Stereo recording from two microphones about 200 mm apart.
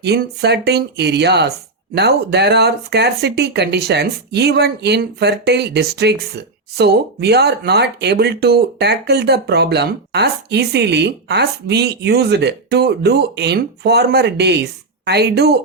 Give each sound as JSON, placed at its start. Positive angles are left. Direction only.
{"t": 0.0, "sound": "speech", "side_deg": -55}